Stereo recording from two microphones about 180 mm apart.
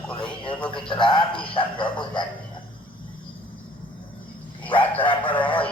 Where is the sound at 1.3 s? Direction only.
30° left (ahead or behind).